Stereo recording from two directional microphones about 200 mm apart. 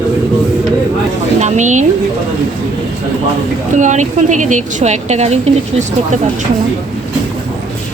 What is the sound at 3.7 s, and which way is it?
Speech, 35° right (ahead or behind).